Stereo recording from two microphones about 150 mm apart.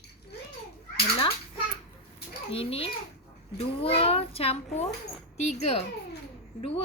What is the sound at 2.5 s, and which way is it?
A child's voice, 40° left (ahead or behind).